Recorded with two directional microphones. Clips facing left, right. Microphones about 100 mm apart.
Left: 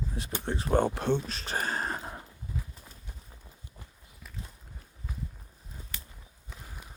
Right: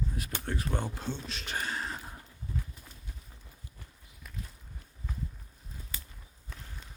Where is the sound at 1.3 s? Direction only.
40° left (ahead or behind).